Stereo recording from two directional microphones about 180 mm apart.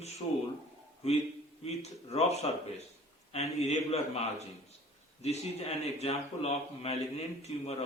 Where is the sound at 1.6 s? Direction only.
35° left (ahead or behind).